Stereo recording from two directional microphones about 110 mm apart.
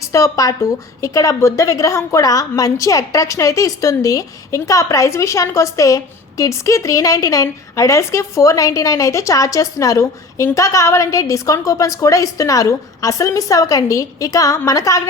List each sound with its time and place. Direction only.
0.1 s a woman's voice: 30° left (ahead or behind)